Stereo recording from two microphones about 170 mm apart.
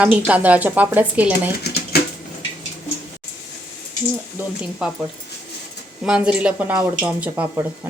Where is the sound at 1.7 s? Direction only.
70° left (ahead or behind).